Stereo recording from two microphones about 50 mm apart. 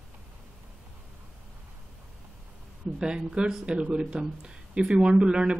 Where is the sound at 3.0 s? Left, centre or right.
Centre.